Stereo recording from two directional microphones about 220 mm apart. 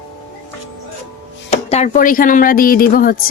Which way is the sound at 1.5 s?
30° left (ahead or behind).